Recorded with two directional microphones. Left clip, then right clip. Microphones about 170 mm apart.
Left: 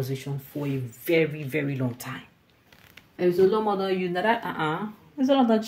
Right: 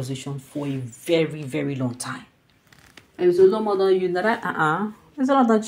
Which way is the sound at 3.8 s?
5° right (ahead or behind).